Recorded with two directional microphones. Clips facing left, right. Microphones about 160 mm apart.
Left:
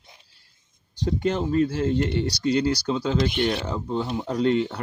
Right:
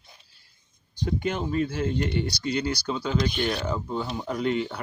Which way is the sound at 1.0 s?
35° left (ahead or behind).